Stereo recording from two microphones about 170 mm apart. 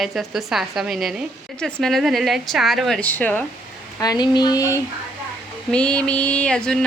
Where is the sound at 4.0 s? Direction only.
25° left (ahead or behind).